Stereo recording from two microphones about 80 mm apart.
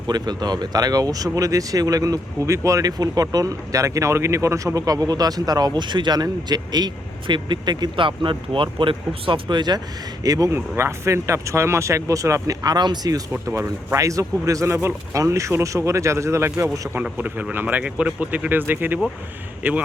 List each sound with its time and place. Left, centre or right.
0.1 s speech: right
10.2 s speech: right
10.5 s speech: right
13.4 s speech: right
17.0 s speech: right